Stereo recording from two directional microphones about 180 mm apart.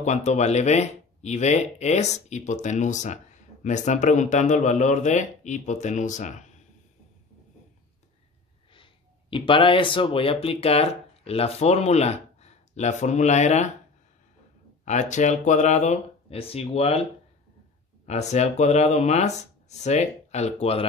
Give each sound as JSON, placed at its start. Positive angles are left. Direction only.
{"t": 0.0, "sound": "speech", "side_deg": 40}
{"t": 8.7, "sound": "speech", "side_deg": 30}
{"t": 14.9, "sound": "speech", "side_deg": 40}
{"t": 18.0, "sound": "speech", "side_deg": 40}